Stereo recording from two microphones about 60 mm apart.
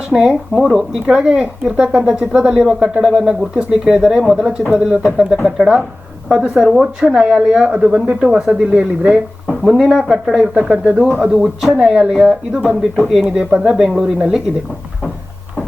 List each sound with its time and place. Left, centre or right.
0.1 s speech: centre
11.3 s speech: centre
11.8 s speech: centre